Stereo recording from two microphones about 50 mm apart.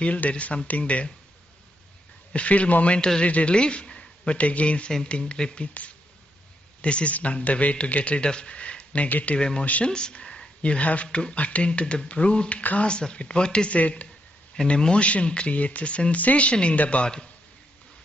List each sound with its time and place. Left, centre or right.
0.0 s speech: left
2.3 s speech: left
13.7 s speech: left
14.6 s speech: centre